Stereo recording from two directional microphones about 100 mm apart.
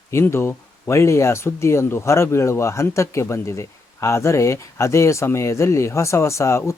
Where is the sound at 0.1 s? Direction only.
30° left (ahead or behind).